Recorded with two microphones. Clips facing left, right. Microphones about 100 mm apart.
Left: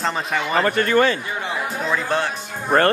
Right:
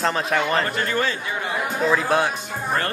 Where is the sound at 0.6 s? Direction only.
65° left (ahead or behind).